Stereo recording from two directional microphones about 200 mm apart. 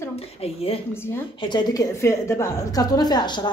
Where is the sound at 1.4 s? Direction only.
20° left (ahead or behind).